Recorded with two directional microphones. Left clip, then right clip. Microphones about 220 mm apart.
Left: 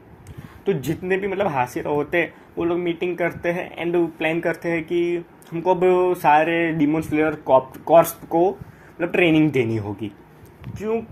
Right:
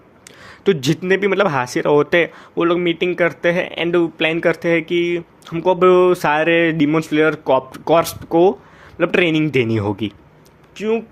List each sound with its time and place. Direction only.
0.6 s speech: 45° right (ahead or behind)